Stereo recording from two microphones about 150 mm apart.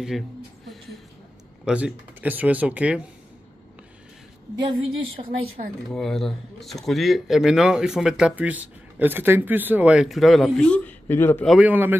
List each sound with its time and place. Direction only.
1.6 s speech: 5° right (ahead or behind)
4.6 s a woman's voice: 35° right (ahead or behind)
5.9 s speech: centre (ahead or behind)
11.4 s speech: centre (ahead or behind)
11.7 s speech: 15° right (ahead or behind)